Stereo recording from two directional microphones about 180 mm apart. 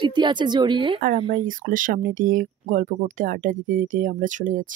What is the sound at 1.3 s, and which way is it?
Speech, 50° right (ahead or behind).